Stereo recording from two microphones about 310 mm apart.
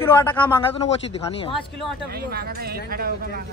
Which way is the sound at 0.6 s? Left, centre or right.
Centre.